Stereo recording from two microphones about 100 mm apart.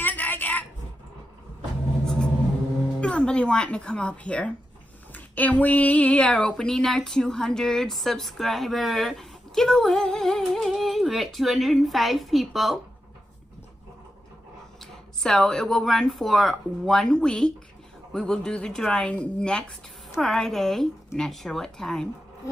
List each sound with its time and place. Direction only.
0.0 s a sound: 15° left (ahead or behind)
3.0 s speech: 10° left (ahead or behind)
15.2 s speech: 5° left (ahead or behind)